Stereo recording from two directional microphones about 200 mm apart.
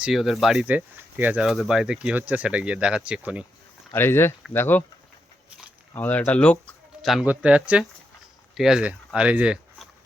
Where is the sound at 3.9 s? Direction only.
10° left (ahead or behind).